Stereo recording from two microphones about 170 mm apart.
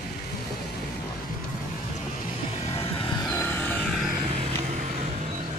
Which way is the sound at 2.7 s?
35° left (ahead or behind).